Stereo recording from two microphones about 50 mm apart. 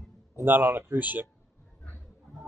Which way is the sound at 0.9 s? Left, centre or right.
Right.